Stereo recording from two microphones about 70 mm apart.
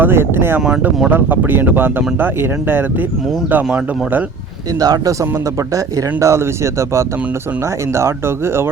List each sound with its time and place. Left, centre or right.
0.0 s speech: right
4.8 s a man's voice: right
5.7 s speech: right